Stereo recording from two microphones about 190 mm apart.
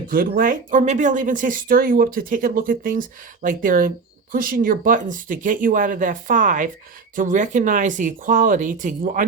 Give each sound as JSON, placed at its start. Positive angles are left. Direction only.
{"t": 0.1, "sound": "speech", "side_deg": -50}